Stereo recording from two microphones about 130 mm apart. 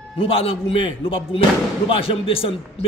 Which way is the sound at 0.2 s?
45° left (ahead or behind).